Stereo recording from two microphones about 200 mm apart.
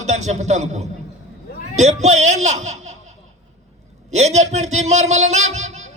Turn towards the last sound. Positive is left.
turn(degrees=-35)  # may be behind; listen again after turning